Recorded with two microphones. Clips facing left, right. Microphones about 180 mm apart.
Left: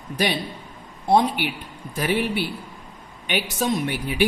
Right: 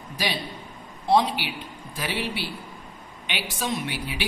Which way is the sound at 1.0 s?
50° left (ahead or behind).